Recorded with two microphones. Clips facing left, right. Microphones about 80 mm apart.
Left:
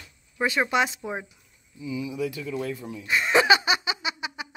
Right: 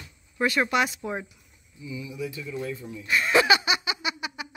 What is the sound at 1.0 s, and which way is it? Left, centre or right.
Speech, centre.